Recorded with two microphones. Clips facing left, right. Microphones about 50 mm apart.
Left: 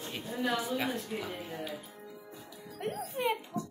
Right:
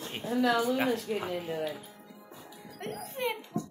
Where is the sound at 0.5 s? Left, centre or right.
Right.